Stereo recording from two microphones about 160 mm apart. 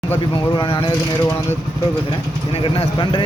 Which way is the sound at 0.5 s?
30° left (ahead or behind).